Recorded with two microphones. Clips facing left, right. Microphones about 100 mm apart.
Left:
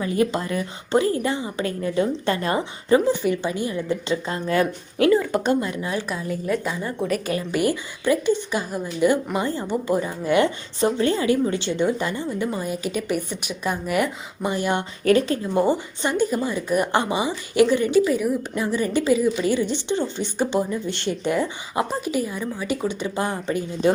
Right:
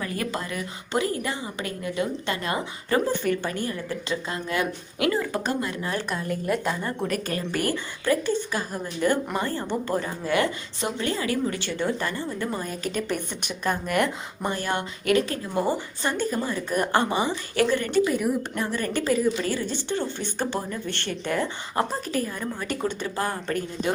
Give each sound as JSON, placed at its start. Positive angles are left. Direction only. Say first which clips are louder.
{"t": 0.0, "sound": "a woman's voice", "louder": "left 7 dB", "side_deg": 20}
{"t": 2.9, "sound": "a woman's voice", "louder": "left 5 dB", "side_deg": 15}
{"t": 4.4, "sound": "speech", "louder": "left 8 dB", "side_deg": 30}
{"t": 5.8, "sound": "a woman's voice", "louder": "left 2 dB", "side_deg": 10}
{"t": 14.5, "sound": "a woman's voice", "louder": "left 5 dB", "side_deg": 15}
{"t": 15.0, "sound": "a woman's voice", "louder": "left 5 dB", "side_deg": 30}